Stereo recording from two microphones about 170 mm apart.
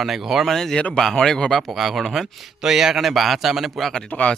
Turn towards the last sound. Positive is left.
turn(degrees=5)  # may be behind; listen again after turning